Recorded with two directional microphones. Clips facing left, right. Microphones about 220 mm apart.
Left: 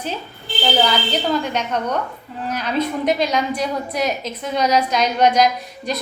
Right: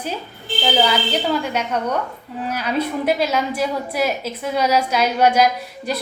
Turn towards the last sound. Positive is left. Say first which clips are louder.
# even
turn(degrees=-5)  # may be behind; listen again after turning